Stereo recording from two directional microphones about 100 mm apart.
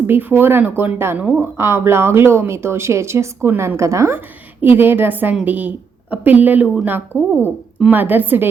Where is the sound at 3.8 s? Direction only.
30° right (ahead or behind).